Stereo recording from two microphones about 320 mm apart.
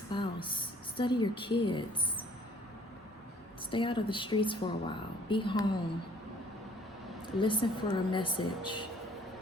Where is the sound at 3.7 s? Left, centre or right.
Centre.